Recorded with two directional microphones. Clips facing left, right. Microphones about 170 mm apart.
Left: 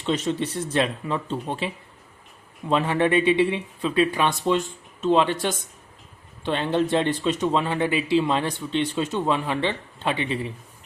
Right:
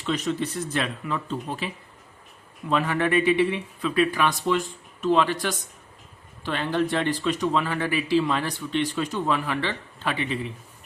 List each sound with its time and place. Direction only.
0.0 s speech: 25° left (ahead or behind)